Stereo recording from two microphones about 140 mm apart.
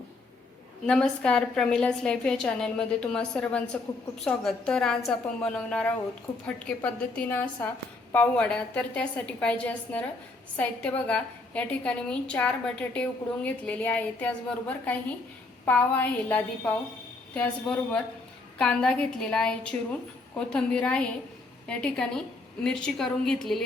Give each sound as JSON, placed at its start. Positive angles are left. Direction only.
{"t": 0.9, "sound": "a woman's voice", "side_deg": 5}